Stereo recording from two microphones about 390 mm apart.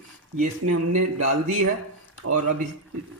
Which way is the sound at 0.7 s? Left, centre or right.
Right.